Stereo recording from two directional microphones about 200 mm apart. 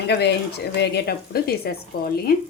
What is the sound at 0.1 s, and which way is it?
A woman's voice, 55° left (ahead or behind).